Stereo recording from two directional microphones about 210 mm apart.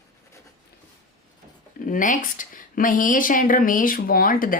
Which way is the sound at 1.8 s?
40° left (ahead or behind).